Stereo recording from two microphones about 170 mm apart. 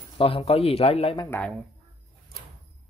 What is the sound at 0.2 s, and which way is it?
Speech, 35° left (ahead or behind).